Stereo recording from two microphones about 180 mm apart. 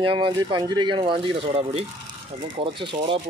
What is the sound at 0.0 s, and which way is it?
Speech, 25° right (ahead or behind).